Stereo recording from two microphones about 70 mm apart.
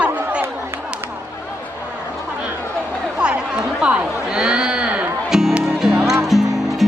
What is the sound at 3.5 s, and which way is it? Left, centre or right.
Speech, centre.